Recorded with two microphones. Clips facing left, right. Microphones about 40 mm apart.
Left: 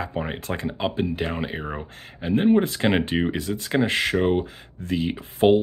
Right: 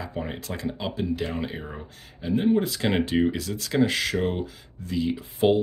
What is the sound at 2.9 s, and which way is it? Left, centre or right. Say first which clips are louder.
Speech: left 1 dB; left.